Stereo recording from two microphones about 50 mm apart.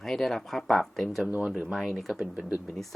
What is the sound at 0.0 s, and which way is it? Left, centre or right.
Speech, centre.